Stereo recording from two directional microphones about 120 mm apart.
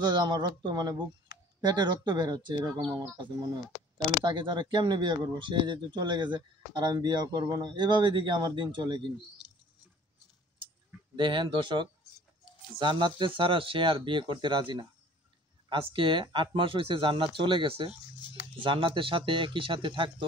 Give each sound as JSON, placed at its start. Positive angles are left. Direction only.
{"t": 0.0, "sound": "speech", "side_deg": -35}
{"t": 11.1, "sound": "speech", "side_deg": -40}